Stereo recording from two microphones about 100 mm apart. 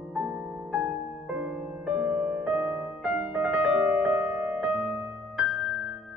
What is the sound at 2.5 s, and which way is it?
Music, 20° right (ahead or behind).